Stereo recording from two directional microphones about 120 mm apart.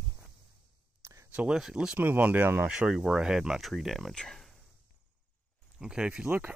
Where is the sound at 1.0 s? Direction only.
25° right (ahead or behind).